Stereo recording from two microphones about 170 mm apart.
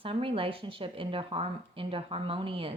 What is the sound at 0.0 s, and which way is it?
A woman's voice, 30° right (ahead or behind).